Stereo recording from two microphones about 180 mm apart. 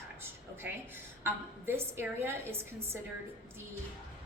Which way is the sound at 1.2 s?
15° right (ahead or behind).